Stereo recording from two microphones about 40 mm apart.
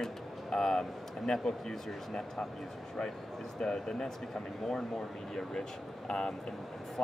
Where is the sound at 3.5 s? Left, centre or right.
Centre.